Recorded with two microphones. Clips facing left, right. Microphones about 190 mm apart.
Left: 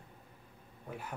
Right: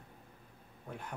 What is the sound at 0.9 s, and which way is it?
Speech, 5° left (ahead or behind).